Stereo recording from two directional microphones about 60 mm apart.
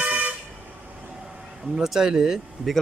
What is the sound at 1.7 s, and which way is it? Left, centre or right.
Speech, centre.